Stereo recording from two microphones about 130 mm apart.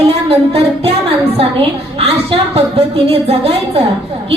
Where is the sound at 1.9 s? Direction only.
50° right (ahead or behind).